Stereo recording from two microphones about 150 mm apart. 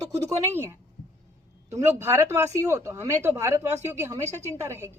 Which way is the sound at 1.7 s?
20° right (ahead or behind).